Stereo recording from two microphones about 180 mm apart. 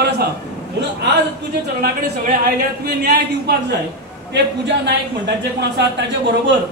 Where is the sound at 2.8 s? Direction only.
60° right (ahead or behind).